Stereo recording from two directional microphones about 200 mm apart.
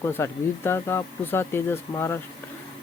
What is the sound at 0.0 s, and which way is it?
Speech, 10° left (ahead or behind).